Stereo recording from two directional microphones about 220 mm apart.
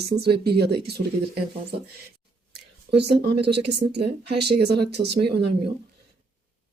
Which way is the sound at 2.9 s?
50° right (ahead or behind).